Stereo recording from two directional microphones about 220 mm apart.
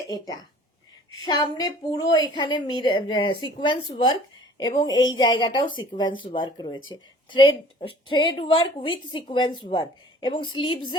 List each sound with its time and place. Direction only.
1.3 s a woman's voice: 20° left (ahead or behind)